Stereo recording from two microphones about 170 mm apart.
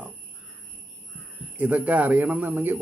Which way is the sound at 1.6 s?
10° right (ahead or behind).